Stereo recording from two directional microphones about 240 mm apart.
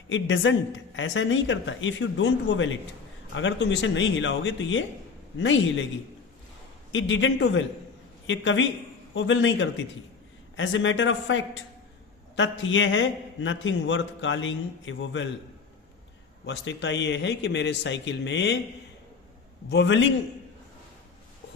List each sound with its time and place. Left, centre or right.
0.1 s a man's voice: left
6.9 s a man's voice: left
16.5 s a man's voice: left
19.7 s a man's voice: left